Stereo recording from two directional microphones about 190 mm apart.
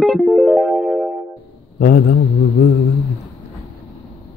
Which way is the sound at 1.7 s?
50° left (ahead or behind).